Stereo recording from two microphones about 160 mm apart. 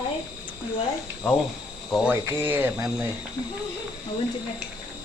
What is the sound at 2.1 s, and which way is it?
Speech, 15° right (ahead or behind).